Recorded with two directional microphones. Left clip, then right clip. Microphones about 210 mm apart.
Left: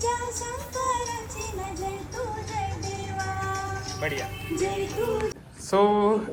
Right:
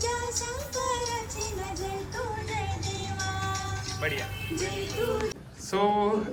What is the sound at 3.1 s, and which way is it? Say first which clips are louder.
Speech: left 3 dB; 40° left (ahead or behind).